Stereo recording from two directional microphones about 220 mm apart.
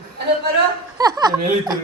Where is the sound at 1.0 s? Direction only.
15° right (ahead or behind).